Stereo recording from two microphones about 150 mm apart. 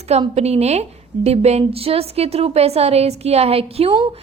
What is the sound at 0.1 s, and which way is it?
A woman's voice, 45° right (ahead or behind).